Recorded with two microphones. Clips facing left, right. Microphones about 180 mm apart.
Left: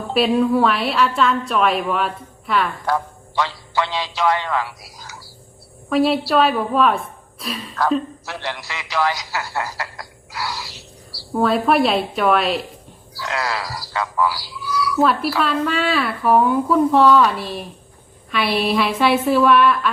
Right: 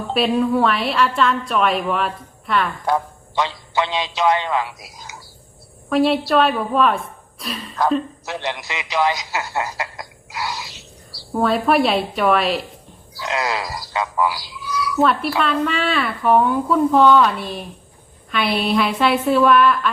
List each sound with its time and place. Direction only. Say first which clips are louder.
0.1 s a woman's voice: left 2 dB; centre (ahead or behind)
2.8 s a man's voice: right 1 dB; 20° right (ahead or behind)
5.9 s a woman's voice: even; centre (ahead or behind)
8.2 s a man's voice: right 3 dB; 20° right (ahead or behind)
11.3 s a woman's voice: even; centre (ahead or behind)
13.1 s a man's voice: right 2 dB; 20° right (ahead or behind)
15.4 s a woman's voice: even; centre (ahead or behind)